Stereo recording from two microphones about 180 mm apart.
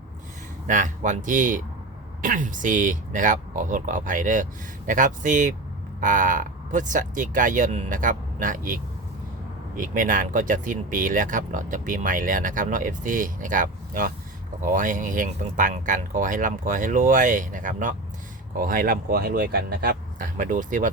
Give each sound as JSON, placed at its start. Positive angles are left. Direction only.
{"t": 0.7, "sound": "speech", "side_deg": -45}